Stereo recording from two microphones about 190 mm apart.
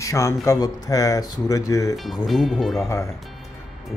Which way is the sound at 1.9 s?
Centre (ahead or behind).